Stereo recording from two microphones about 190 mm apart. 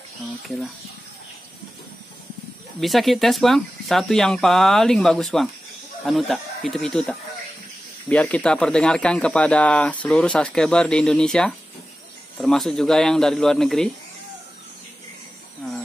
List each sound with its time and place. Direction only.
2.8 s speech: centre (ahead or behind)